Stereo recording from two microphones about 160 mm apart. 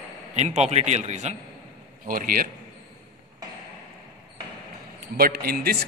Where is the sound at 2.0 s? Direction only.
65° right (ahead or behind).